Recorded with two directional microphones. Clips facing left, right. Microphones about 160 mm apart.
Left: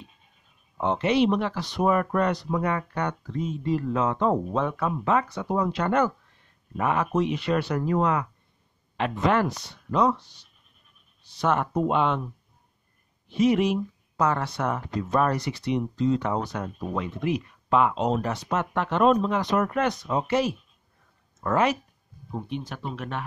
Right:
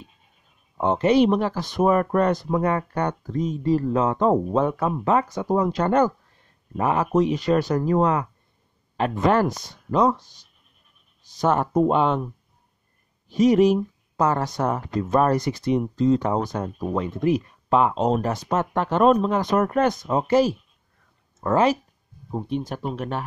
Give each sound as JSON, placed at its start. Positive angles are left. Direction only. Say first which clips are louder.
{"t": 0.7, "sound": "speech", "louder": "right 4 dB", "side_deg": -40}
{"t": 11.4, "sound": "speech", "louder": "right 4 dB", "side_deg": -35}
{"t": 13.3, "sound": "speech", "louder": "right 5 dB", "side_deg": -40}
{"t": 22.3, "sound": "speech", "louder": "right 6 dB", "side_deg": -40}